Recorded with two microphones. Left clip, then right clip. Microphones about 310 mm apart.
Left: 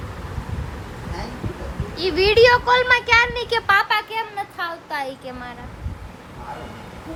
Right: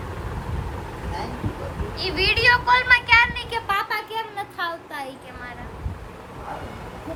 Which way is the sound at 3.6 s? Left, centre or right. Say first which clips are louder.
Left 7 dB; left.